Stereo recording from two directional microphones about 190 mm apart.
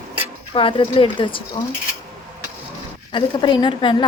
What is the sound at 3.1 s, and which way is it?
Speech, 25° left (ahead or behind).